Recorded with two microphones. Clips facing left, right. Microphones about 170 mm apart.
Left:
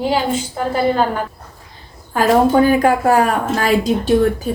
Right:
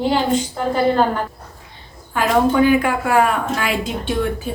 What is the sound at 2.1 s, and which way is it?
Speech, 40° left (ahead or behind).